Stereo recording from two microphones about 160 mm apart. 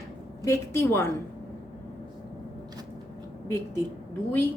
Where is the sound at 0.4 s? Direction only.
15° left (ahead or behind).